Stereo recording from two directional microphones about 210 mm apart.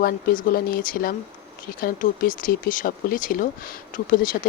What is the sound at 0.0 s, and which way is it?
Speech, 40° left (ahead or behind).